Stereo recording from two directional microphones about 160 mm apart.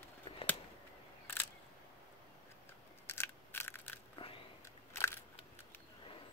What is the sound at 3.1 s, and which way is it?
Scissors, 15° left (ahead or behind).